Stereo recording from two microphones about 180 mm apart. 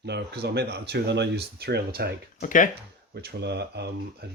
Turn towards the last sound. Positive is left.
turn(degrees=-65)  # may be behind; listen again after turning